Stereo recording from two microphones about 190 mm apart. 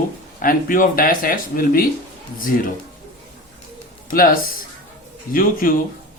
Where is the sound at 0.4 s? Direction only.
45° left (ahead or behind).